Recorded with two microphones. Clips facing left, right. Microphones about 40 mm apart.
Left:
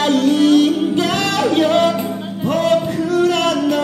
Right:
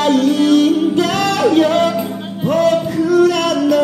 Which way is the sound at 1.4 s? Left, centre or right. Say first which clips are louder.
Right 3 dB; centre.